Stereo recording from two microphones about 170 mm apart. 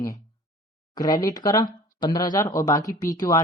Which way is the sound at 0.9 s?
20° left (ahead or behind).